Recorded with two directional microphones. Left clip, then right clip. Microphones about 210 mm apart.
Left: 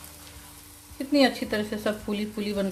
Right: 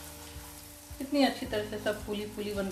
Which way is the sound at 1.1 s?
50° left (ahead or behind).